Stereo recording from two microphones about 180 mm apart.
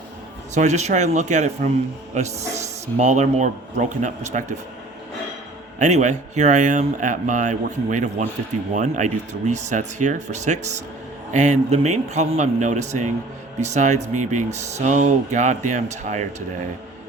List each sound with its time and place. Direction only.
0.5 s speech: 40° right (ahead or behind)
5.8 s speech: 40° right (ahead or behind)